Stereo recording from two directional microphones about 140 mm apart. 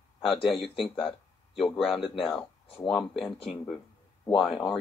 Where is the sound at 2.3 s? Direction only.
40° left (ahead or behind).